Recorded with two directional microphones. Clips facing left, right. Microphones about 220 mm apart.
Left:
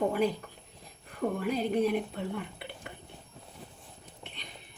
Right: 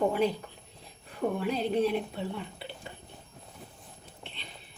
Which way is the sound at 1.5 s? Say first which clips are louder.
Even; 10° left (ahead or behind).